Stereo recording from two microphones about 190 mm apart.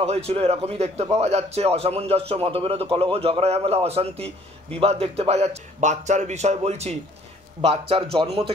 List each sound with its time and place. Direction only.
0.0 s a man's voice: 35° right (ahead or behind)